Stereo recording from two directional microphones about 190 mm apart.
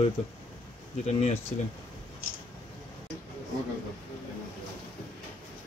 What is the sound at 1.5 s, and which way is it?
Speech, 40° left (ahead or behind).